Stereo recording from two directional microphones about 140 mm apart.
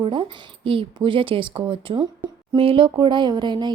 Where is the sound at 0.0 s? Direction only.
35° right (ahead or behind).